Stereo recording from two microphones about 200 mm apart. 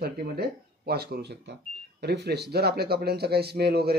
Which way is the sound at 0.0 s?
50° right (ahead or behind).